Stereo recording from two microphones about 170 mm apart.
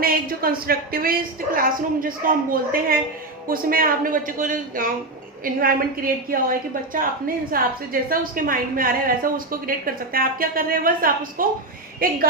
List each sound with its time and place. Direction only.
0.0 s a woman's voice: 60° right (ahead or behind)